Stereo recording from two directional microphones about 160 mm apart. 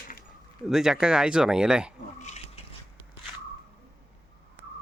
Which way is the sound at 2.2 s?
45° left (ahead or behind).